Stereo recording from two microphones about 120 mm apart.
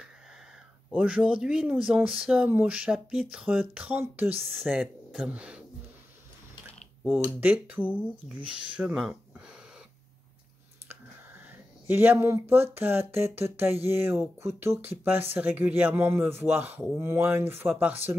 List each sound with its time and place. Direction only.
0.9 s speech: 10° right (ahead or behind)
4.4 s speech: centre (ahead or behind)
7.2 s speech: 15° right (ahead or behind)
7.8 s speech: 15° left (ahead or behind)
8.5 s speech: 10° right (ahead or behind)
11.9 s speech: 15° right (ahead or behind)